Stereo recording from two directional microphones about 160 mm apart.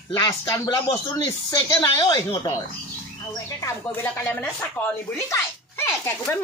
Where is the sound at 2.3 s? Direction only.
20° left (ahead or behind).